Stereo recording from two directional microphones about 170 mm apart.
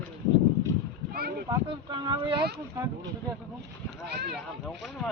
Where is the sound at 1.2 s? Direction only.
65° right (ahead or behind).